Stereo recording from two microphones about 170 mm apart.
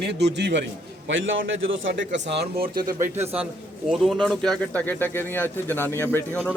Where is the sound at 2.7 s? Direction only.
25° right (ahead or behind).